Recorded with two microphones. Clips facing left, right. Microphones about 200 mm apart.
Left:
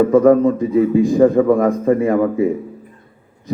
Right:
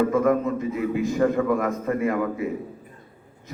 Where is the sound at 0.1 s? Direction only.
35° left (ahead or behind).